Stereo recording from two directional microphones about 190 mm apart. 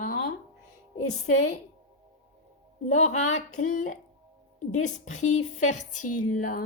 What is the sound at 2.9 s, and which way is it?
A woman's voice, 40° left (ahead or behind).